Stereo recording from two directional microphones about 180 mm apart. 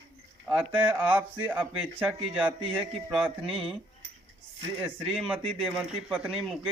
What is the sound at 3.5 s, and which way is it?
Speech, 30° right (ahead or behind).